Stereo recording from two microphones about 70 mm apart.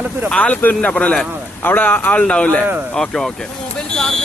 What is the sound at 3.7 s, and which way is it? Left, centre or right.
Vehicle, centre.